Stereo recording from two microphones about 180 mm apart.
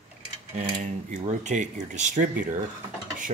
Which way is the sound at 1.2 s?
40° right (ahead or behind).